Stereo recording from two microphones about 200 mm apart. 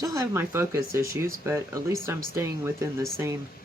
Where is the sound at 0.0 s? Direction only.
15° right (ahead or behind).